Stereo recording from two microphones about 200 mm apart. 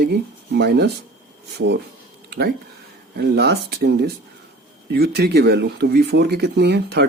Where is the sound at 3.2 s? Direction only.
55° right (ahead or behind).